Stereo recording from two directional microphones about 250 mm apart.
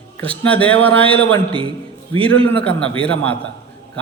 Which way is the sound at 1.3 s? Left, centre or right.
Right.